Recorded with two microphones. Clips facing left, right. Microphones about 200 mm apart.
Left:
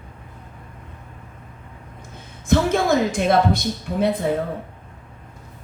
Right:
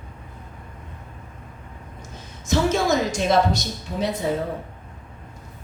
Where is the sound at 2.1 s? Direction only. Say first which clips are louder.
Left 4 dB; 55° left (ahead or behind).